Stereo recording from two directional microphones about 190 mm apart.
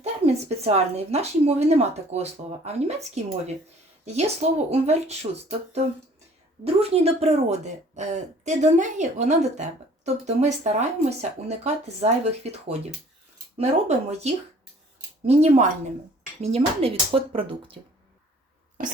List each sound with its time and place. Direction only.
0.0 s a woman's voice: 35° right (ahead or behind)